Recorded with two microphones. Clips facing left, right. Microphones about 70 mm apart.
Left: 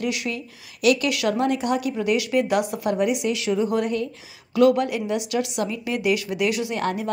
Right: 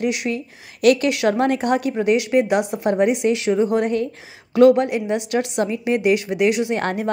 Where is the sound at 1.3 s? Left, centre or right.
Right.